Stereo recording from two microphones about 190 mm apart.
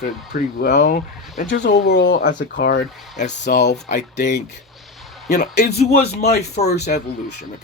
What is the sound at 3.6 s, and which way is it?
Speech, 40° left (ahead or behind).